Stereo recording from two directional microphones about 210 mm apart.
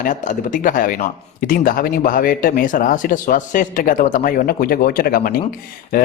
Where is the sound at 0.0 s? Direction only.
40° left (ahead or behind).